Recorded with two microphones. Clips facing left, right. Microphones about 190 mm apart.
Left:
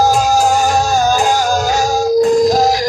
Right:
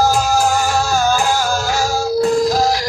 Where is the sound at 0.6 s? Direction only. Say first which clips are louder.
Left 4 dB; 40° left (ahead or behind).